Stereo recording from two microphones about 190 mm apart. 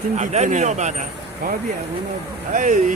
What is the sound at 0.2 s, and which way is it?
Speech, 40° right (ahead or behind).